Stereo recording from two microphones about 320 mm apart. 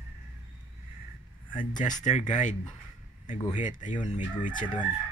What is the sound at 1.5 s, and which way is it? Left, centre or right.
Speech, centre.